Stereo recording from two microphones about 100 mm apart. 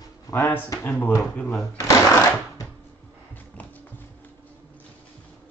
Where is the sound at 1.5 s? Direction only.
35° left (ahead or behind).